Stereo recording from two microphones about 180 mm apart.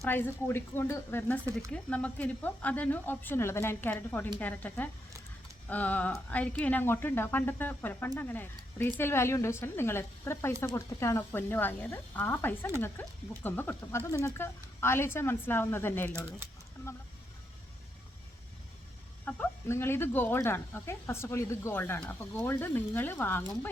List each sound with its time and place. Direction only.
0.0 s speech: 10° left (ahead or behind)
19.2 s speech: 10° left (ahead or behind)